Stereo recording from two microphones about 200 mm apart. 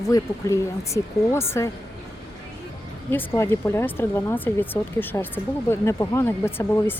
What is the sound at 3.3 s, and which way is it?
Speech, 10° left (ahead or behind).